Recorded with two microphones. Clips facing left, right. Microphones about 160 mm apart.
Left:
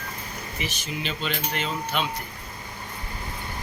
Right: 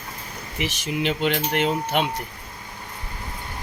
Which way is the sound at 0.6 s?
65° right (ahead or behind).